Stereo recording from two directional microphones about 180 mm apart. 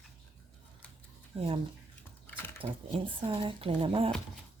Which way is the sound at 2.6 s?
35° right (ahead or behind).